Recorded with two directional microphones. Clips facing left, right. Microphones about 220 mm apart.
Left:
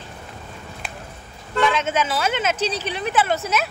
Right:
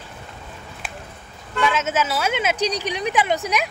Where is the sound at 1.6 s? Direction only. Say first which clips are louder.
Left 1 dB; 5° right (ahead or behind).